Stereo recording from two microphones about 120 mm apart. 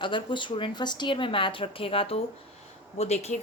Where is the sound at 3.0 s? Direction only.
60° left (ahead or behind).